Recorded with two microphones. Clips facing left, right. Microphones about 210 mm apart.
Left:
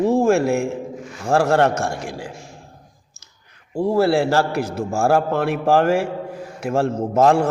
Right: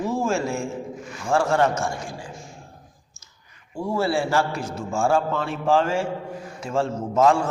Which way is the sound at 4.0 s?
65° left (ahead or behind).